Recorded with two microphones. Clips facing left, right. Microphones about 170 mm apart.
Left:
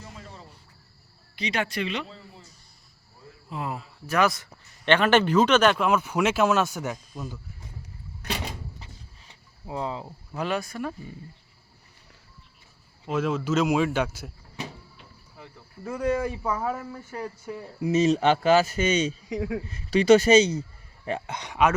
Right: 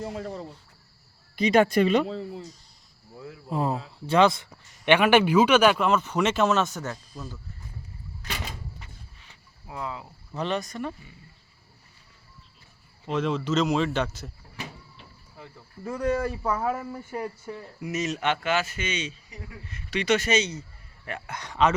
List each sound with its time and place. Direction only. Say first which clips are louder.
0.0 s cricket: right 11 dB; 65° right (ahead or behind)
1.4 s speech: right 9 dB; 50° right (ahead or behind)
3.5 s speech: right 6 dB; 35° right (ahead or behind)
4.9 s speech: right 1 dB; 10° right (ahead or behind)
5.8 s speech: even; 10° left (ahead or behind)
9.6 s speech: left 4 dB; 30° left (ahead or behind)
10.3 s speech: even; 5° left (ahead or behind)
13.1 s speech: left 1 dB; 5° left (ahead or behind)
15.8 s speech: even; 5° left (ahead or behind)
17.5 s speech: left 7 dB; 20° left (ahead or behind); by 19.1 s 40° left (ahead or behind)
19.3 s speech: left 15 dB; 90° left
19.6 s speech: left 7 dB; 35° left (ahead or behind); by 21.7 s 15° left (ahead or behind)